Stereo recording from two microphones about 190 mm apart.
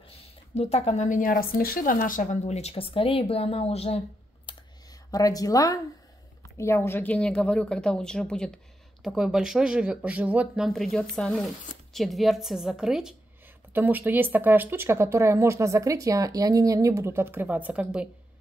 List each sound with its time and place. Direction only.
0.2 s speech: 35° left (ahead or behind)
4.5 s computer keyboard: 25° left (ahead or behind)
5.1 s a woman's voice: 20° left (ahead or behind); by 18.0 s 10° right (ahead or behind)